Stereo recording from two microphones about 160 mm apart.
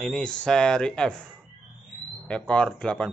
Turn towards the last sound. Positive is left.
turn(degrees=5)  # may be behind; listen again after turning